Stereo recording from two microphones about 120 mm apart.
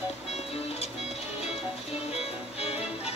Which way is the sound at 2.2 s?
55° left (ahead or behind).